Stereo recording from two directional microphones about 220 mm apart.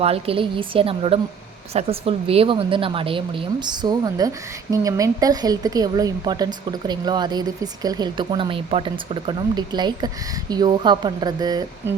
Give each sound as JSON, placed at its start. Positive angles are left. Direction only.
{"t": 0.0, "sound": "speech", "side_deg": -25}